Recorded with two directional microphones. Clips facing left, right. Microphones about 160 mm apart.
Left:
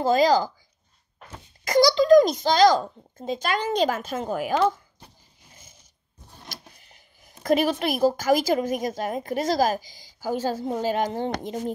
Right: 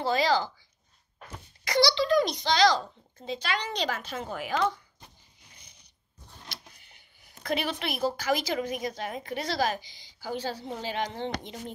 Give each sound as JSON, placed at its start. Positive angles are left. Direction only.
{"t": 0.0, "sound": "a woman's voice", "side_deg": 45}
{"t": 1.6, "sound": "a woman's voice", "side_deg": 45}
{"t": 5.0, "sound": "a sound", "side_deg": 45}
{"t": 7.8, "sound": "a woman's voice", "side_deg": 45}